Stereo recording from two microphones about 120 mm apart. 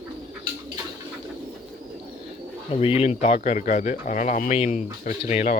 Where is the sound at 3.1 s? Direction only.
65° left (ahead or behind).